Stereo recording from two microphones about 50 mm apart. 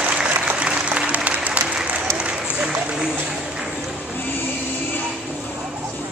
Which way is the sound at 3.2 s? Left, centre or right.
Centre.